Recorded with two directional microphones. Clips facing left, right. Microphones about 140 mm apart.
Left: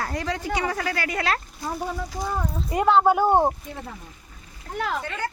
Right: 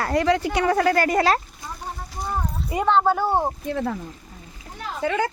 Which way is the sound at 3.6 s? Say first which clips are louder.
Right 11 dB; 90° right.